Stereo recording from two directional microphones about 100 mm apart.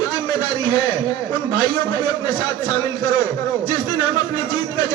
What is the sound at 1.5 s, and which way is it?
A man's voice, 50° left (ahead or behind).